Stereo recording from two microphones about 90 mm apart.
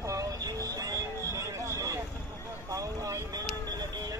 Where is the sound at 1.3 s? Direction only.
35° right (ahead or behind).